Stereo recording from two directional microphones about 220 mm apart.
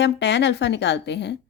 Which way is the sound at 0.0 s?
50° left (ahead or behind).